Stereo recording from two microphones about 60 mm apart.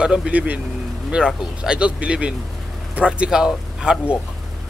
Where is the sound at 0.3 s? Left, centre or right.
Right.